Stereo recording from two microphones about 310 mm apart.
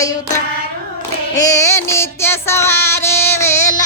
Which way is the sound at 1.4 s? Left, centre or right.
Centre.